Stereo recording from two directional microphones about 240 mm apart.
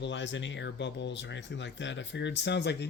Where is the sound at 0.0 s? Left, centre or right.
Left.